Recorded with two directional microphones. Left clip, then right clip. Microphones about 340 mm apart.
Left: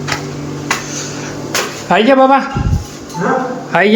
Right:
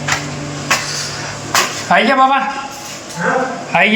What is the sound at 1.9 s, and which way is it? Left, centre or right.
Speech, centre.